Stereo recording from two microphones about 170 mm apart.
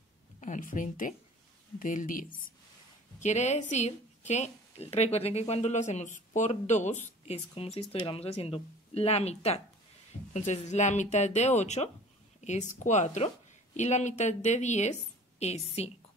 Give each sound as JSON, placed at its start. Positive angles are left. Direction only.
{"t": 0.4, "sound": "a woman's voice", "side_deg": 50}